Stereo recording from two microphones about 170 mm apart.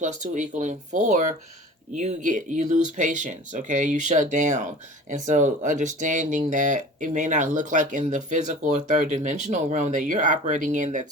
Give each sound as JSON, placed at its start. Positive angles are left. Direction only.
{"t": 0.0, "sound": "speech", "side_deg": -45}